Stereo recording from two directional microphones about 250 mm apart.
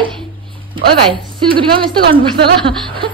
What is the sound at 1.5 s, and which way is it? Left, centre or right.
Speech, centre.